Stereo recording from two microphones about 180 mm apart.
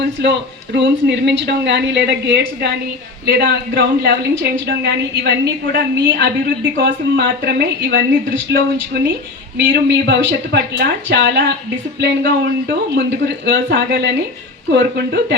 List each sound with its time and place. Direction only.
0.2 s a woman's voice: 75° right (ahead or behind)